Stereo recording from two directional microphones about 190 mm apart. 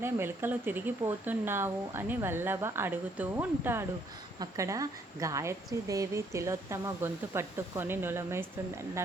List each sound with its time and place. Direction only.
0.0 s a woman's voice: 10° right (ahead or behind)